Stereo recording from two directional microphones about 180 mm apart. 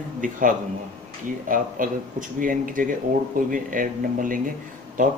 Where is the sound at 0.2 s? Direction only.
50° right (ahead or behind).